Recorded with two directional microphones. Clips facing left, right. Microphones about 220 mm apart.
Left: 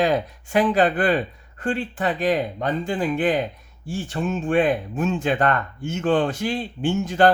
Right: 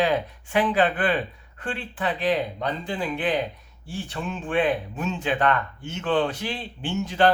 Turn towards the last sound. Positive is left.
turn(degrees=45)  # may be behind; listen again after turning